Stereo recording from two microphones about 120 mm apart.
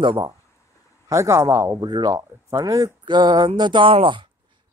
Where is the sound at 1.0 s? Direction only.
25° right (ahead or behind).